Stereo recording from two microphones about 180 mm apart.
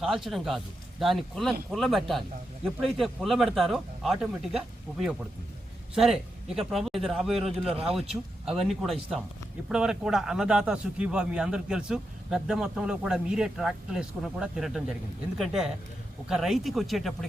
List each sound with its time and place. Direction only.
0.0 s speech: centre (ahead or behind)
7.7 s speech: 35° right (ahead or behind)
8.1 s speech: centre (ahead or behind)